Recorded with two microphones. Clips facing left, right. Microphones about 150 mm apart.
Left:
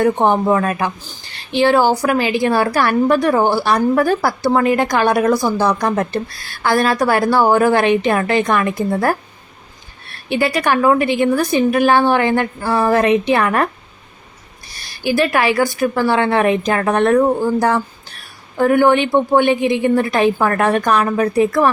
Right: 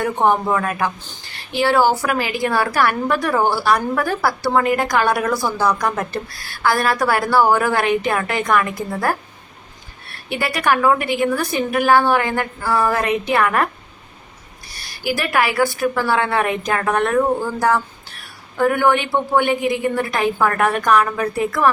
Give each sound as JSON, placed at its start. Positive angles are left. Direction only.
{"t": 0.0, "sound": "a woman's voice", "side_deg": 20}
{"t": 10.2, "sound": "a woman's voice", "side_deg": 25}
{"t": 15.0, "sound": "a woman's voice", "side_deg": 25}